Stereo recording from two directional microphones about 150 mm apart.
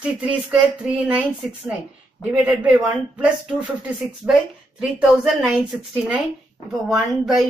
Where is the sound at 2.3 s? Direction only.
5° right (ahead or behind).